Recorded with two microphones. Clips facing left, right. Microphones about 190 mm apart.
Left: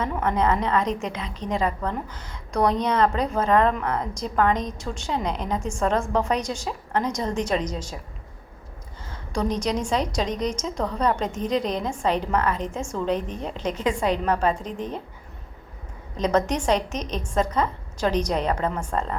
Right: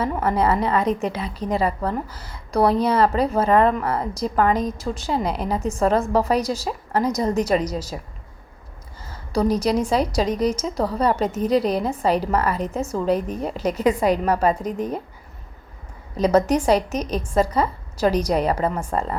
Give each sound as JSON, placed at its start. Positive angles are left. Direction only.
{"t": 0.0, "sound": "a woman's voice", "side_deg": -5}
{"t": 9.0, "sound": "a woman's voice", "side_deg": -5}
{"t": 12.8, "sound": "a woman's voice", "side_deg": -35}
{"t": 13.1, "sound": "a woman's voice", "side_deg": -10}
{"t": 16.1, "sound": "a woman's voice", "side_deg": -10}